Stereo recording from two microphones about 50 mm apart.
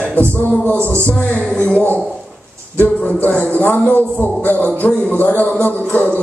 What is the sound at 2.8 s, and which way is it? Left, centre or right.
A man's voice, left.